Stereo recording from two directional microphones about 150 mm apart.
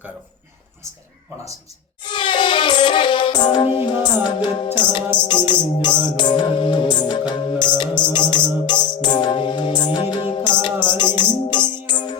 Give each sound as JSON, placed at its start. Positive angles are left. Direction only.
{"t": 2.0, "sound": "music", "side_deg": 30}